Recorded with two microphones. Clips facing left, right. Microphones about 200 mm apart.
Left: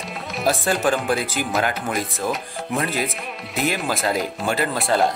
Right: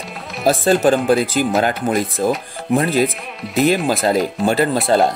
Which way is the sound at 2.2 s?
35° right (ahead or behind).